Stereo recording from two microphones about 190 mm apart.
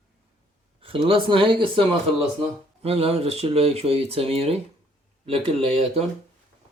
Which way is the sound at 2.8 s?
30° right (ahead or behind).